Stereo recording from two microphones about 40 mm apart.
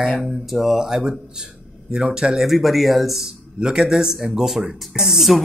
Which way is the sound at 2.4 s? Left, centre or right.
Centre.